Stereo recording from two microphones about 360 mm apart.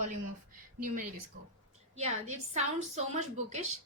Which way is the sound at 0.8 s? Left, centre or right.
Right.